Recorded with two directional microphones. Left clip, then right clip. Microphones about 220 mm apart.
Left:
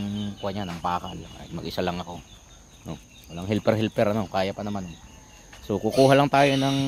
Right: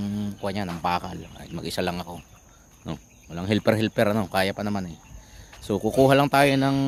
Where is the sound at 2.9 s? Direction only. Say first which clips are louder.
Right 3 dB; 25° right (ahead or behind).